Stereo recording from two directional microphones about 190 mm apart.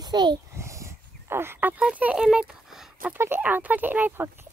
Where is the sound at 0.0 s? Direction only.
20° right (ahead or behind).